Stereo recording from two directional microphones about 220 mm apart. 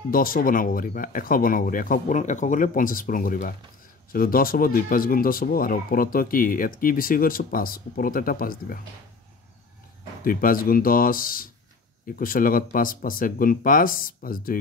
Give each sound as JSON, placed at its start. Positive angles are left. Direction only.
{"t": 0.1, "sound": "speech", "side_deg": 40}
{"t": 10.2, "sound": "speech", "side_deg": 40}